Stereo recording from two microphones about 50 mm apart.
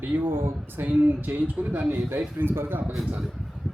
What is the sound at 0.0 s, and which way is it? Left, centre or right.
A man's voice, right.